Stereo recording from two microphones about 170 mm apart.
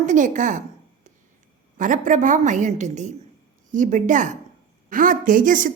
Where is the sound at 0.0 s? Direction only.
50° right (ahead or behind).